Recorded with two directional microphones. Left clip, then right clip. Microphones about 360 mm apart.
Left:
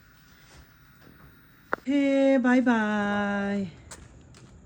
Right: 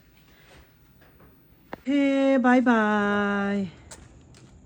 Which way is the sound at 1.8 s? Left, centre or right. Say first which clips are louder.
Right 1 dB; centre.